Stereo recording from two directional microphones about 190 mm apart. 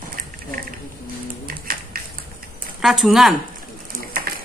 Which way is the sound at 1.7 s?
50° right (ahead or behind).